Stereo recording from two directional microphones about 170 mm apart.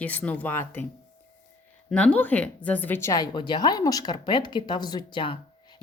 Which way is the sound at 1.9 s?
5° left (ahead or behind).